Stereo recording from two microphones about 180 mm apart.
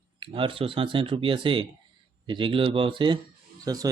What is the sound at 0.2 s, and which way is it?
Speech, 30° right (ahead or behind).